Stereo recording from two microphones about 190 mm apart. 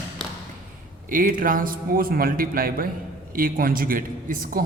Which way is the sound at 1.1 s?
45° right (ahead or behind).